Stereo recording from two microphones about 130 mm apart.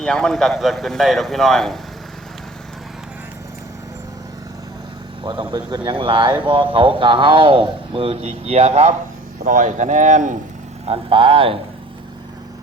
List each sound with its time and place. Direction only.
0.0 s speech: 5° left (ahead or behind)
5.2 s a man's voice: 35° right (ahead or behind); by 9.0 s 55° right (ahead or behind)
9.4 s speech: 85° right
10.8 s speech: 45° right (ahead or behind)